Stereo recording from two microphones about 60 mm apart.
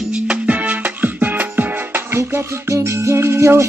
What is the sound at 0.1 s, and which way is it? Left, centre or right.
Music, centre.